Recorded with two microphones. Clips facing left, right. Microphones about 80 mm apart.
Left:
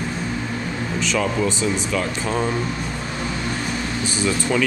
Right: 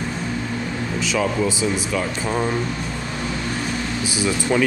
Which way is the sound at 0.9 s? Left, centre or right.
Centre.